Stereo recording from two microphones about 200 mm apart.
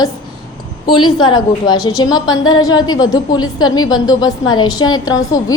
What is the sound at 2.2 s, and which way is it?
Speech, 90° left.